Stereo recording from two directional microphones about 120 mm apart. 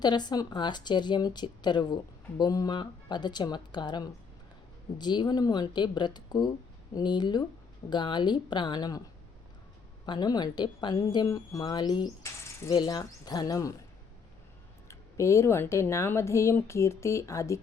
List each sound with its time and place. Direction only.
0.0 s speech: 35° left (ahead or behind)
10.1 s speech: 35° left (ahead or behind)
14.8 s speech: 25° left (ahead or behind)